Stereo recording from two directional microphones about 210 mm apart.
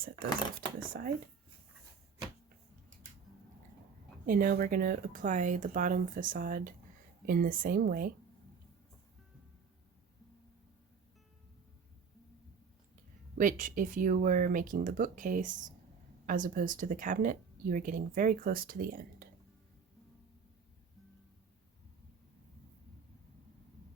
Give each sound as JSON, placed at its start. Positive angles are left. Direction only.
{"t": 0.8, "sound": "speech", "side_deg": -40}
{"t": 4.3, "sound": "speech", "side_deg": -45}
{"t": 13.4, "sound": "speech", "side_deg": -40}